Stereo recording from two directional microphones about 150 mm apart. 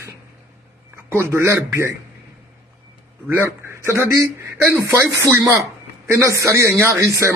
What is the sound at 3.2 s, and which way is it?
Speech, 15° right (ahead or behind).